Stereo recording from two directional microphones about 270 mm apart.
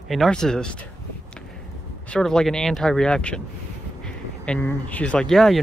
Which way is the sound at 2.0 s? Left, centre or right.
Centre.